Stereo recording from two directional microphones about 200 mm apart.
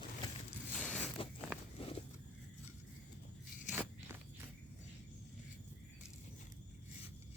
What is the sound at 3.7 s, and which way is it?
Biting, 10° right (ahead or behind).